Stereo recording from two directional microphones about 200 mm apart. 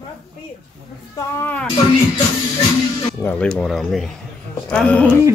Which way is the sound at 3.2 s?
5° left (ahead or behind).